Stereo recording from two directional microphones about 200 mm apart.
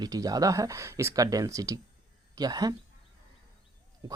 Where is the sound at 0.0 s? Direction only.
20° right (ahead or behind).